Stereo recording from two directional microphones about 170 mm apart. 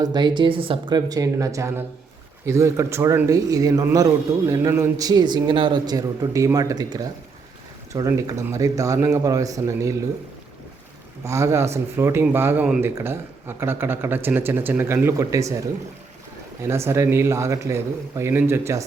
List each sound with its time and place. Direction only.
0.0 s a man's voice: 25° right (ahead or behind)
11.2 s speech: 15° right (ahead or behind)
16.6 s speech: 15° right (ahead or behind)